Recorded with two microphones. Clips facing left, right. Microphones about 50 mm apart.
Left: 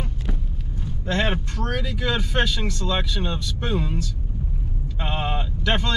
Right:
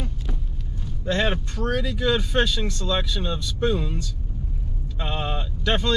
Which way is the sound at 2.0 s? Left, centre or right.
Left.